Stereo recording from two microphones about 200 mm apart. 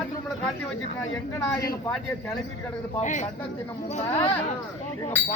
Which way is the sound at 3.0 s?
40° left (ahead or behind).